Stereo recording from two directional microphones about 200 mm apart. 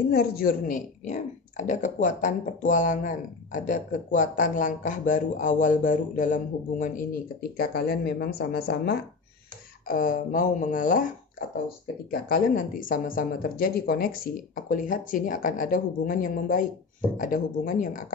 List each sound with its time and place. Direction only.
0.1 s speech: 50° left (ahead or behind)